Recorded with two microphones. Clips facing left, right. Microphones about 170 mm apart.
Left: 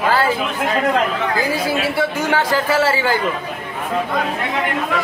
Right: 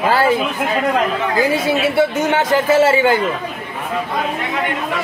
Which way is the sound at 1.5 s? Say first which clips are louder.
Right 4 dB; 25° right (ahead or behind).